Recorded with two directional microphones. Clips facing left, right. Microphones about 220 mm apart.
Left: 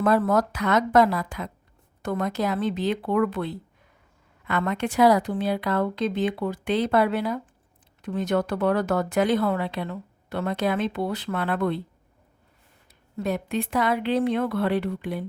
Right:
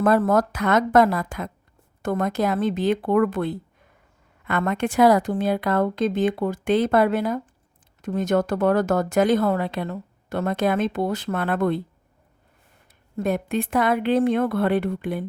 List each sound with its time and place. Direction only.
0.0 s speech: 50° right (ahead or behind)
13.1 s speech: 50° right (ahead or behind)